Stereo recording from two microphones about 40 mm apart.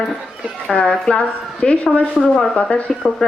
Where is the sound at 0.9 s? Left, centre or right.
Left.